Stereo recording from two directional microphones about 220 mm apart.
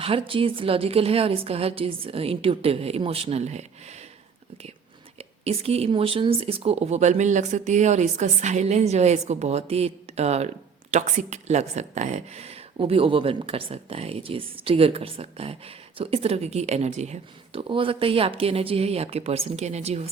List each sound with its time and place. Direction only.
0.0 s speech: 25° right (ahead or behind)
5.1 s speech: 30° right (ahead or behind)